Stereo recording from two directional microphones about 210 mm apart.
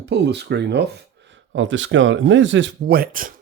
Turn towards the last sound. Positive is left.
turn(degrees=-45)  # may be behind; listen again after turning